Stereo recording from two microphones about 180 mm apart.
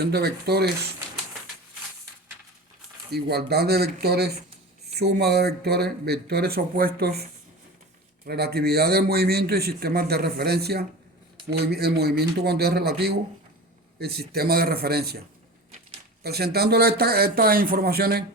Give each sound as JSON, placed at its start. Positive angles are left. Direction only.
{"t": 0.0, "sound": "a man's voice", "side_deg": -65}
{"t": 3.1, "sound": "a man's voice", "side_deg": -60}
{"t": 8.3, "sound": "a man's voice", "side_deg": -60}
{"t": 16.2, "sound": "a man's voice", "side_deg": -60}